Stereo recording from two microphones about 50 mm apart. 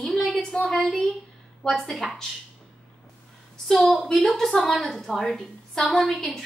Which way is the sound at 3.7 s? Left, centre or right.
Centre.